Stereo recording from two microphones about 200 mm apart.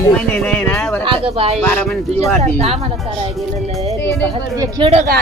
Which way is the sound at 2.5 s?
30° right (ahead or behind).